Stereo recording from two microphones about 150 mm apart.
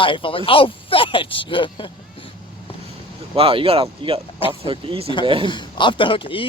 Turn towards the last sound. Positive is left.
turn(degrees=35)  # may be behind; listen again after turning